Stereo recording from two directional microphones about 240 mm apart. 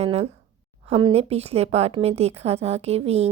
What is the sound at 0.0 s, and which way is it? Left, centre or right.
A woman's voice, right.